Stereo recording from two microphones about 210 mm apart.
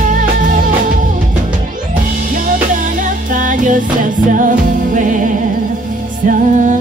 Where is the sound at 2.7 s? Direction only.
40° right (ahead or behind).